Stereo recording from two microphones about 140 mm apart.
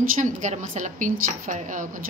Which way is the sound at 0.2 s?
60° right (ahead or behind).